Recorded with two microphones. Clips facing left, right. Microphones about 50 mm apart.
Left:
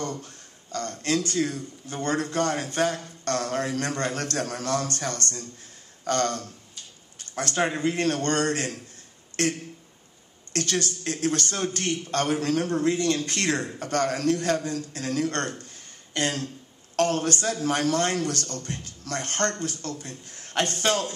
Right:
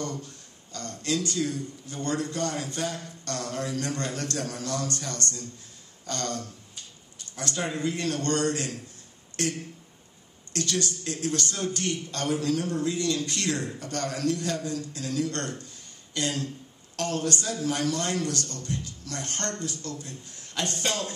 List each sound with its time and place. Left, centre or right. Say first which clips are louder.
0.0 s a woman's voice: left 1 dB; left